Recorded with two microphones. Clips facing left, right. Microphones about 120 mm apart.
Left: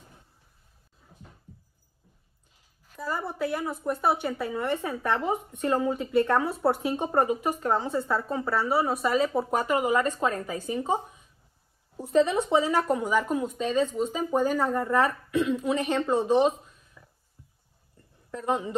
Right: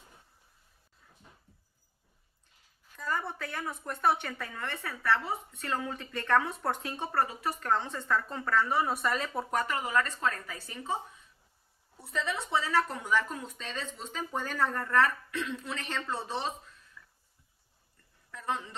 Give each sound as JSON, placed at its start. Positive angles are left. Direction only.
{"t": 3.0, "sound": "a woman's voice", "side_deg": 10}
{"t": 4.4, "sound": "a woman's voice", "side_deg": 15}
{"t": 9.7, "sound": "a woman's voice", "side_deg": 15}
{"t": 12.1, "sound": "speech", "side_deg": 25}
{"t": 13.0, "sound": "a woman's voice", "side_deg": 10}
{"t": 15.7, "sound": "speech", "side_deg": 20}
{"t": 16.3, "sound": "a sound", "side_deg": 15}
{"t": 18.4, "sound": "a woman's voice", "side_deg": 15}